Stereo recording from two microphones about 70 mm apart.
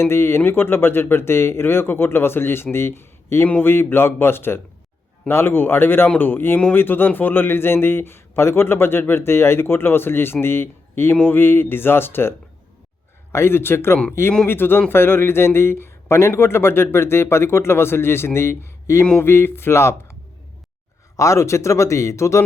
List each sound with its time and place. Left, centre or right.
0.0 s speech: left
13.3 s speech: left
21.2 s speech: left